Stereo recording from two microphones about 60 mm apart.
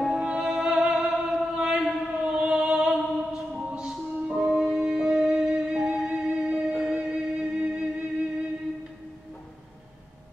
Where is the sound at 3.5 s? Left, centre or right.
Centre.